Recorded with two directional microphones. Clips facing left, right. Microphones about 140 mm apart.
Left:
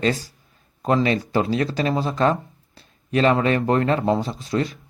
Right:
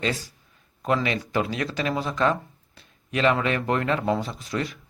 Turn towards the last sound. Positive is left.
turn(degrees=25)  # may be behind; listen again after turning